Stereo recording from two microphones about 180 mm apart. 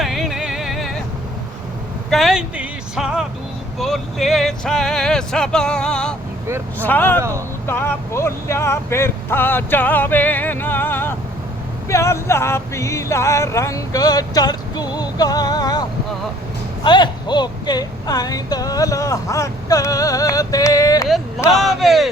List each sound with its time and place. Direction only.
0.0 s music: centre (ahead or behind)
2.0 s speech: centre (ahead or behind)
7.2 s speech: 15° right (ahead or behind)
7.7 s speech: 15° left (ahead or behind)
11.9 s music: 15° left (ahead or behind)
16.8 s speech: 25° left (ahead or behind)
21.5 s speech: centre (ahead or behind)